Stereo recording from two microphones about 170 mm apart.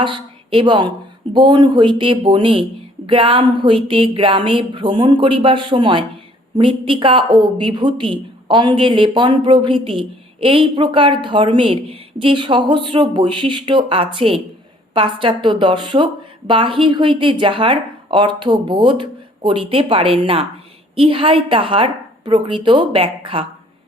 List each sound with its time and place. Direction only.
0.0 s a woman's voice: 30° right (ahead or behind)